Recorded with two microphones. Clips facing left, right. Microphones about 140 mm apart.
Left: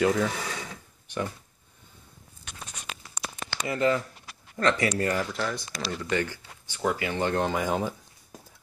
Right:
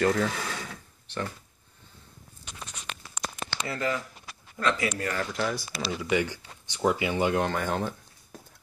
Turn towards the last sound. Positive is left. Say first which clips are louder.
# left 2 dB
turn(degrees=5)  # may be behind; listen again after turning